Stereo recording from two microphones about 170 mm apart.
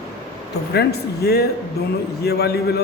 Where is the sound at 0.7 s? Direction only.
70° left (ahead or behind).